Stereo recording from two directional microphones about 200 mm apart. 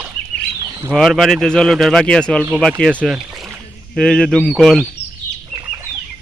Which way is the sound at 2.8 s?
5° left (ahead or behind).